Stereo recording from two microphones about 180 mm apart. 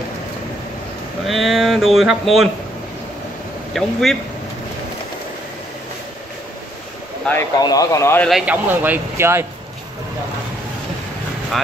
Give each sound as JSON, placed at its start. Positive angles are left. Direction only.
{"t": 1.2, "sound": "speech", "side_deg": 0}
{"t": 3.7, "sound": "speech", "side_deg": 0}
{"t": 7.2, "sound": "speech", "side_deg": 15}
{"t": 8.3, "sound": "speech", "side_deg": -5}